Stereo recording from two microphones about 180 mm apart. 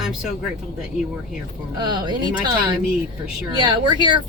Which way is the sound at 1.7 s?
25° right (ahead or behind).